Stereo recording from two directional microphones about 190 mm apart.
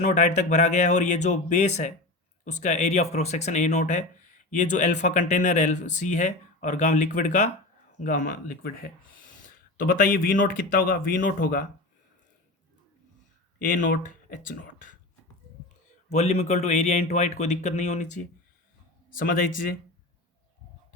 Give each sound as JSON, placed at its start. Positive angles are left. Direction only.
{"t": 0.0, "sound": "speech", "side_deg": 40}
{"t": 13.7, "sound": "speech", "side_deg": 45}
{"t": 16.1, "sound": "speech", "side_deg": 35}